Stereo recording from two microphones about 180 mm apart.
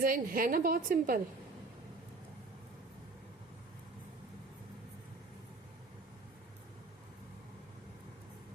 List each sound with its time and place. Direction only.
0.0 s a woman's voice: 50° right (ahead or behind)